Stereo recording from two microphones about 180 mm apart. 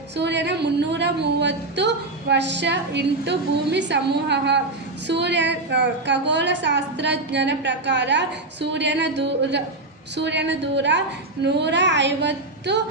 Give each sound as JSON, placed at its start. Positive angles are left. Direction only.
{"t": 0.1, "sound": "a woman's voice", "side_deg": -70}